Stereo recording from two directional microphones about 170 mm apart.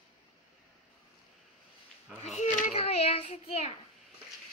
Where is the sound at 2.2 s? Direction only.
45° left (ahead or behind).